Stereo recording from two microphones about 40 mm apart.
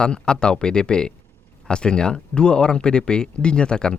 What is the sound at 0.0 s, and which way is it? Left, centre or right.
Speech, left.